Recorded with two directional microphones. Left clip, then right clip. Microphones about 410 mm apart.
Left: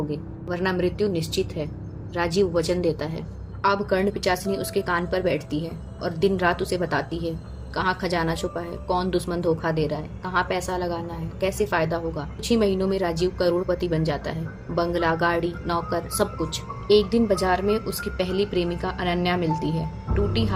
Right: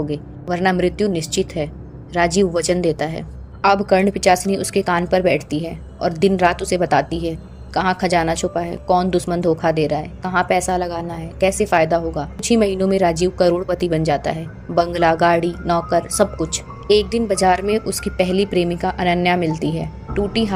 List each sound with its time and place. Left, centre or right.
0.1 s a woman's voice: centre